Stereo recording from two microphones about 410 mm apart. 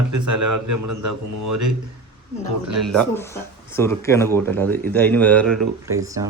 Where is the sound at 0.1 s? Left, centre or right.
Right.